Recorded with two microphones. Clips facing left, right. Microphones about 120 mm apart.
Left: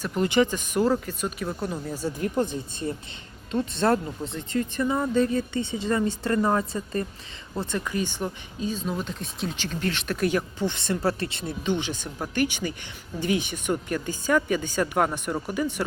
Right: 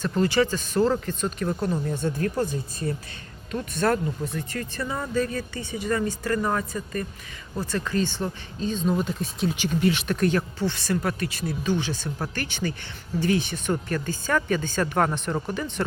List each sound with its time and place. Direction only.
0.0 s speech: 15° left (ahead or behind); by 10.1 s 10° right (ahead or behind)
10.1 s speech: 10° left (ahead or behind)